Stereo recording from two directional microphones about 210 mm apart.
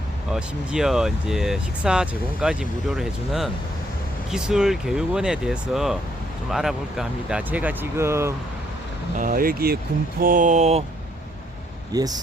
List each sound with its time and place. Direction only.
0.3 s speech: 5° right (ahead or behind)
9.1 s speech: 40° right (ahead or behind)
11.9 s speech: 20° right (ahead or behind)